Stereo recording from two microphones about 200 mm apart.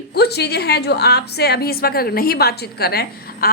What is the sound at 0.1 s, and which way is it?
A woman's voice, 55° left (ahead or behind).